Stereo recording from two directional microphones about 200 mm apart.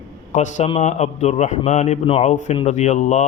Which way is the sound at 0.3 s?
35° left (ahead or behind).